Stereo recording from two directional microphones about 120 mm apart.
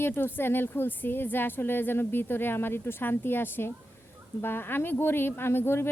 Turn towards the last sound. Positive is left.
turn(degrees=20)  # may be behind; listen again after turning